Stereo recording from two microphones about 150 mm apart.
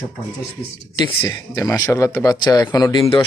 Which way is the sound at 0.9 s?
30° left (ahead or behind).